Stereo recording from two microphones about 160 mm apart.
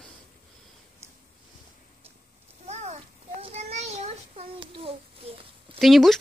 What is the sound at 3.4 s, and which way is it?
Child singing, 40° right (ahead or behind).